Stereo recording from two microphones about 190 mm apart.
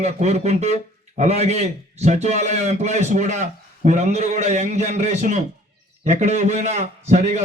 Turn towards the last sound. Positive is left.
turn(degrees=-35)  # may be behind; listen again after turning